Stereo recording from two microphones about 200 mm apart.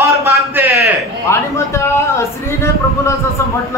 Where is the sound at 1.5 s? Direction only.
15° left (ahead or behind).